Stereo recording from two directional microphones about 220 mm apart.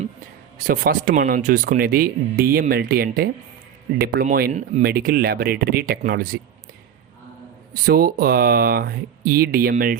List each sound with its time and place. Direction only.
0.7 s speech: 40° right (ahead or behind)
7.9 s speech: 40° right (ahead or behind)